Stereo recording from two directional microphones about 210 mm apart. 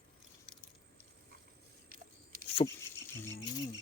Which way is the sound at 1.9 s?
45° right (ahead or behind).